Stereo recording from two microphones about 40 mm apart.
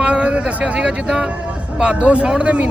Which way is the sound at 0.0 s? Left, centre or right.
Right.